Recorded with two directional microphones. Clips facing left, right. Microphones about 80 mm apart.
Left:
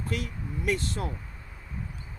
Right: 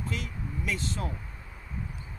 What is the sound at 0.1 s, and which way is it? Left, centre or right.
Speech, left.